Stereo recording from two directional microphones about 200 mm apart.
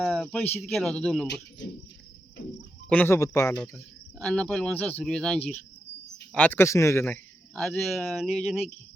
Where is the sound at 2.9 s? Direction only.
10° left (ahead or behind).